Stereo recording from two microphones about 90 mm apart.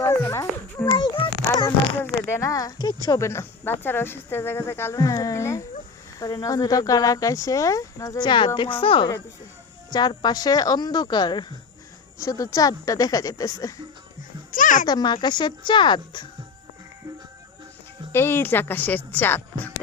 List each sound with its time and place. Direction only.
0.0 s a sound: 35° left (ahead or behind)
0.9 s a sound: 70° left (ahead or behind)
2.0 s a sound: 25° left (ahead or behind); by 2.9 s 45° left (ahead or behind)
3.1 s speech: 30° left (ahead or behind)
4.9 s speech: 40° left (ahead or behind)
8.2 s speech: 60° left (ahead or behind)
9.9 s speech: 55° left (ahead or behind)
12.2 s speech: 40° left (ahead or behind)
14.8 s speech: 55° left (ahead or behind)
18.1 s speech: 25° left (ahead or behind)